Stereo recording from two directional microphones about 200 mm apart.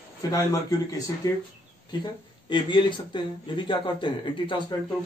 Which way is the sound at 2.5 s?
25° left (ahead or behind).